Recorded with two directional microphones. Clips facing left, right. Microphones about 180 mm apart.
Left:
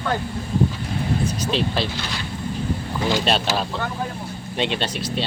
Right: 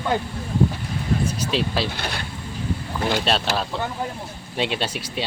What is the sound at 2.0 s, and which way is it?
Speech, 55° right (ahead or behind).